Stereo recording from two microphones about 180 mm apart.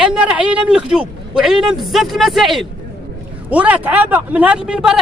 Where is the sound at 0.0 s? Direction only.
5° right (ahead or behind).